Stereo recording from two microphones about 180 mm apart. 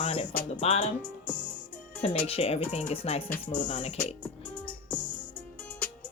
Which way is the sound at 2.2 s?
35° left (ahead or behind).